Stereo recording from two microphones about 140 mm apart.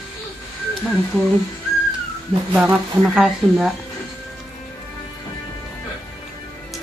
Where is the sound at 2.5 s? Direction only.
10° right (ahead or behind).